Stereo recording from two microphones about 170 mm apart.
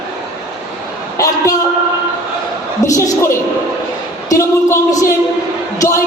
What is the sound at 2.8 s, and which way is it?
Speech, 20° left (ahead or behind).